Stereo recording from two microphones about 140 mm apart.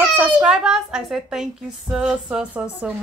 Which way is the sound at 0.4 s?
5° right (ahead or behind).